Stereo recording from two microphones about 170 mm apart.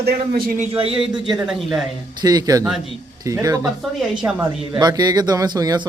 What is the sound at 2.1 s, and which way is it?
Speech, 25° right (ahead or behind).